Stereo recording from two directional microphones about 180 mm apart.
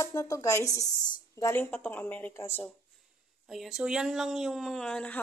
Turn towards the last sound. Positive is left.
turn(degrees=5)  # may be behind; listen again after turning